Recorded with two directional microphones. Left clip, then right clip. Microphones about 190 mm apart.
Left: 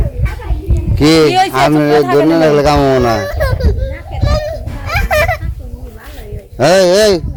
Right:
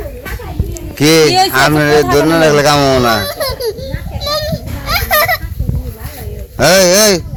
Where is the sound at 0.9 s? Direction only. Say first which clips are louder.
Even; 5° left (ahead or behind).